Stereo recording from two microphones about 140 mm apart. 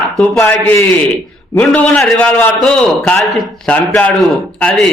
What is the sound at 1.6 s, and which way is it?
A man's voice, 5° left (ahead or behind).